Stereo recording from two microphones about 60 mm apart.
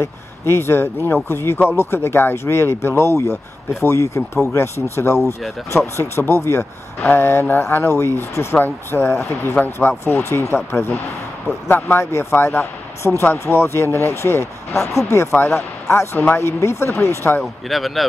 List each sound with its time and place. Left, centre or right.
0.0 s speech: left
12.0 s speech: left
15.3 s speech: left
17.6 s speech: centre